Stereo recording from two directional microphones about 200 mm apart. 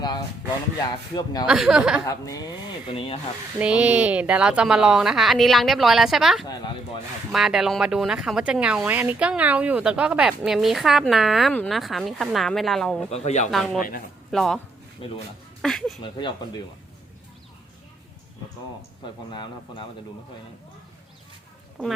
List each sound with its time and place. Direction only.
0.9 s speech: 20° left (ahead or behind)
1.5 s speech: 5° right (ahead or behind)
2.0 s speech: 15° left (ahead or behind)
2.8 s speech: 30° left (ahead or behind)
3.6 s speech: 5° right (ahead or behind)
13.1 s speech: 35° left (ahead or behind)
14.3 s speech: centre (ahead or behind)
15.6 s speech: centre (ahead or behind)
16.1 s speech: 20° left (ahead or behind)
19.3 s speech: 25° left (ahead or behind)
21.8 s speech: 5° left (ahead or behind)